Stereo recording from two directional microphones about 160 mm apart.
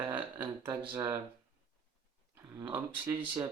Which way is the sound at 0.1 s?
15° right (ahead or behind).